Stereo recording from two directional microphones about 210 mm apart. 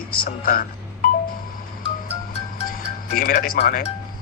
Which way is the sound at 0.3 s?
40° left (ahead or behind).